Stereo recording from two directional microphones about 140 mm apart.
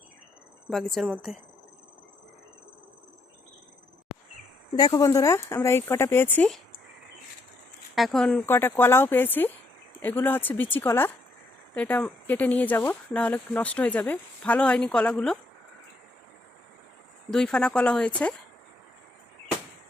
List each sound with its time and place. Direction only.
0.7 s speech: centre (ahead or behind)
4.8 s speech: 25° left (ahead or behind)
7.9 s speech: centre (ahead or behind)
8.4 s speech: 15° left (ahead or behind)
17.3 s speech: 5° left (ahead or behind)